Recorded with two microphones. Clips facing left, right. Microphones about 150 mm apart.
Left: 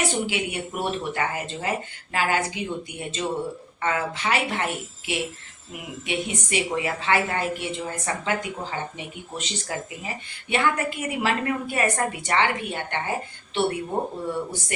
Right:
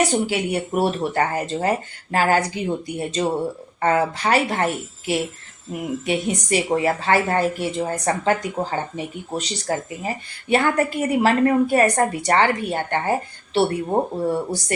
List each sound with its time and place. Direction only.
0.1 s a woman's voice: 40° right (ahead or behind)